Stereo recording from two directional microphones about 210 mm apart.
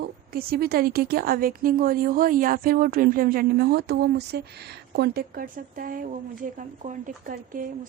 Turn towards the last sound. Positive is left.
turn(degrees=-40)  # may be behind; listen again after turning